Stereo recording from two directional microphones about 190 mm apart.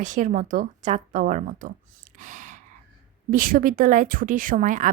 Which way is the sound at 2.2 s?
40° right (ahead or behind).